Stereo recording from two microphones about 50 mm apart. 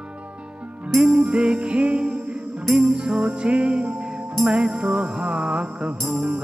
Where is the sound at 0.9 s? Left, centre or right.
Centre.